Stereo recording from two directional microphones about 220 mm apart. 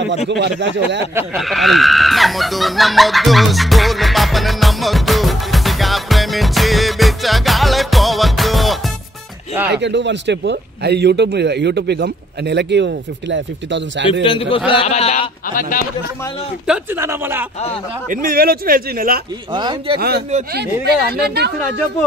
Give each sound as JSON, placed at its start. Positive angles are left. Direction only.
{"t": 0.3, "sound": "speech", "side_deg": -55}
{"t": 1.3, "sound": "a sound", "side_deg": 0}
{"t": 9.7, "sound": "speech", "side_deg": -55}
{"t": 14.2, "sound": "speech", "side_deg": 25}
{"t": 16.6, "sound": "speech", "side_deg": -5}
{"t": 18.1, "sound": "speech", "side_deg": -40}
{"t": 19.5, "sound": "speech", "side_deg": -20}
{"t": 20.0, "sound": "speech", "side_deg": -45}